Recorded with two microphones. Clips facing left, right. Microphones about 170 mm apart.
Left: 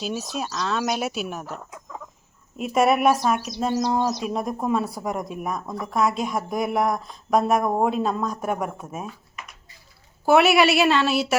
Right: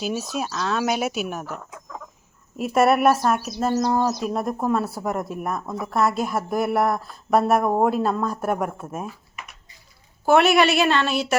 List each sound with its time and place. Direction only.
0.0 s speech: centre (ahead or behind)
2.7 s speech: centre (ahead or behind)
10.2 s speech: 5° left (ahead or behind)